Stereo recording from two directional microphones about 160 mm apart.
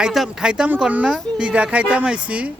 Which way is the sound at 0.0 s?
Centre (ahead or behind).